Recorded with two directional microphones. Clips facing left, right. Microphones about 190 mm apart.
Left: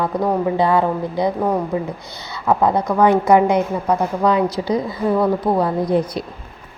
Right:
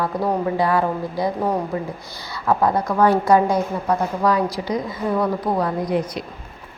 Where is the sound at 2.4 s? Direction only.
20° left (ahead or behind).